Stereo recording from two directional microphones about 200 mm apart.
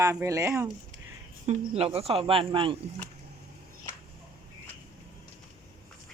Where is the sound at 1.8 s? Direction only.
30° right (ahead or behind).